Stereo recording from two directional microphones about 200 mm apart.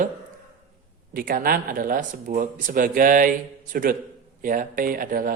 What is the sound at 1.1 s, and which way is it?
Speech, 45° right (ahead or behind).